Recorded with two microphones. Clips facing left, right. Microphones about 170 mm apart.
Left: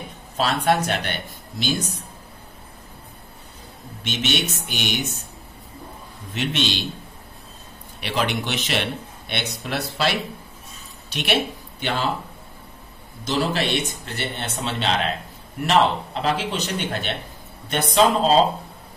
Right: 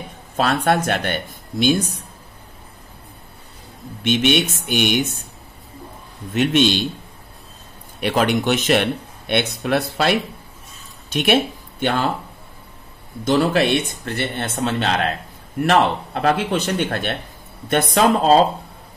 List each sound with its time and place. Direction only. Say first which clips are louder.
0.4 s speech: right 2 dB; 50° right (ahead or behind)
4.0 s speech: right 8 dB; 55° right (ahead or behind)
6.3 s speech: right 8 dB; 50° right (ahead or behind)
8.0 s speech: right 6 dB; 50° right (ahead or behind)
13.2 s speech: right 6 dB; 55° right (ahead or behind)